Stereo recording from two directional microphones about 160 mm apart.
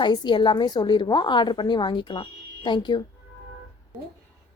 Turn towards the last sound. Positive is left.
turn(degrees=30)  # may be behind; listen again after turning